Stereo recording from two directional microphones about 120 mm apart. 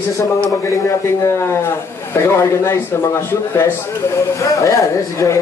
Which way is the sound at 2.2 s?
20° left (ahead or behind).